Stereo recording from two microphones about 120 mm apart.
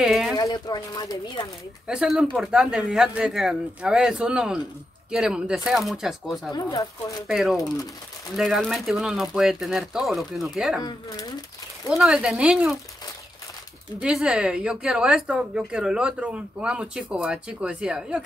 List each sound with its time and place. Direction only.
0.0 s speech: 5° right (ahead or behind)
0.4 s speech: 30° left (ahead or behind)
1.9 s a woman's voice: 5° right (ahead or behind)
6.5 s speech: 35° left (ahead or behind)
7.2 s speech: centre (ahead or behind)
10.8 s speech: 35° left (ahead or behind)
11.9 s speech: 5° right (ahead or behind)
14.0 s a woman's voice: 5° right (ahead or behind)